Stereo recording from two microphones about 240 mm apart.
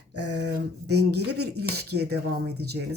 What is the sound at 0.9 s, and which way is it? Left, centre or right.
Speech, right.